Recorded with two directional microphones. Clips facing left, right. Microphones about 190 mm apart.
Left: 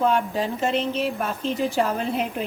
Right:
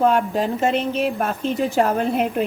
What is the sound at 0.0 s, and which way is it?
A woman's voice, 50° right (ahead or behind).